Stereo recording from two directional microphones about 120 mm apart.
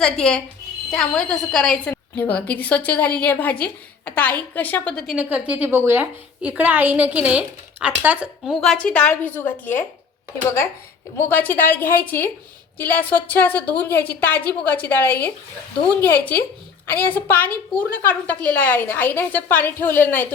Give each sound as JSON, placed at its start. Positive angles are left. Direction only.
{"t": 0.0, "sound": "a woman's voice", "side_deg": 5}
{"t": 5.1, "sound": "a woman's voice", "side_deg": -10}
{"t": 8.6, "sound": "a woman's voice", "side_deg": 5}
{"t": 11.3, "sound": "a woman's voice", "side_deg": 15}